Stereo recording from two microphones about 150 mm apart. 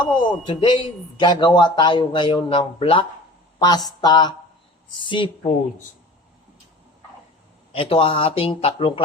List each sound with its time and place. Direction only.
0.0 s speech: 30° left (ahead or behind)
3.6 s a sound: 25° left (ahead or behind)
5.0 s speech: 35° left (ahead or behind)
7.7 s speech: 40° left (ahead or behind)